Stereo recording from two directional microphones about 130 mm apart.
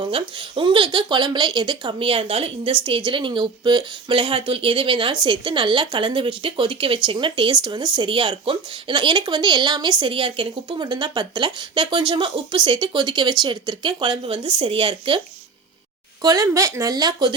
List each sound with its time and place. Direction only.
0.0 s speech: 40° right (ahead or behind)
16.2 s speech: 25° right (ahead or behind)